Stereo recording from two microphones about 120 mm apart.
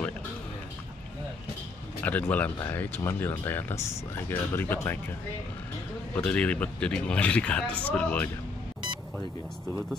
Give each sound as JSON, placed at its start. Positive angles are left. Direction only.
{"t": 2.0, "sound": "speech", "side_deg": 15}
{"t": 6.1, "sound": "speech", "side_deg": 10}